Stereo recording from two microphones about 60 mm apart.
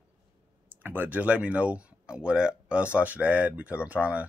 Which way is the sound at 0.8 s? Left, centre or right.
Right.